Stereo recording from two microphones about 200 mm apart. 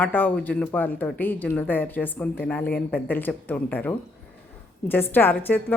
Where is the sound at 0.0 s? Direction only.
10° left (ahead or behind).